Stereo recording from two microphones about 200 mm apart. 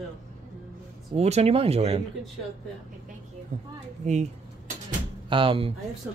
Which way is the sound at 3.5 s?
40° right (ahead or behind).